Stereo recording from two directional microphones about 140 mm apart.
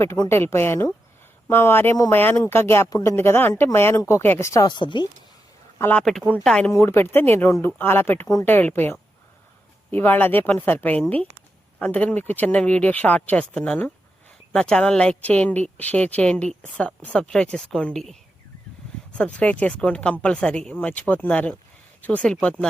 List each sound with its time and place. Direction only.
0.0 s a woman's voice: 20° left (ahead or behind)
4.5 s speech: 30° left (ahead or behind)
5.8 s speech: 10° left (ahead or behind)
6.7 s speech: 15° left (ahead or behind)